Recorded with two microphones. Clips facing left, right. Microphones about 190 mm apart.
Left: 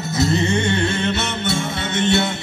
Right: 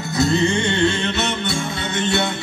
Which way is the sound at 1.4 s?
25° left (ahead or behind).